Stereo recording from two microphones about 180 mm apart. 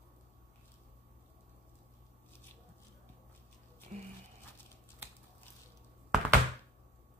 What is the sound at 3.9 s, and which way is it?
Music, 40° right (ahead or behind).